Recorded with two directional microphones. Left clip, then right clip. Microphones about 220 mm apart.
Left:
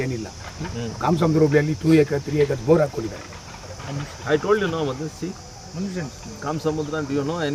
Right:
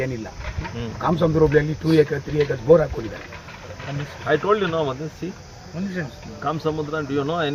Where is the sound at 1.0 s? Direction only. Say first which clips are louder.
Right 1 dB; 30° left (ahead or behind).